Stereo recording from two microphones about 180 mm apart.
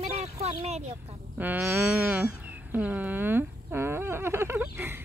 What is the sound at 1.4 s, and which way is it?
Speech, 10° right (ahead or behind).